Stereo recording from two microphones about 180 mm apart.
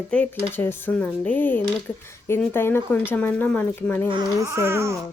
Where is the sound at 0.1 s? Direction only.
10° left (ahead or behind).